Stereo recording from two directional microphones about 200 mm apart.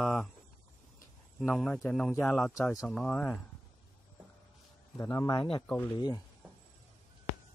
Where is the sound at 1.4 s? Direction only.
Centre (ahead or behind).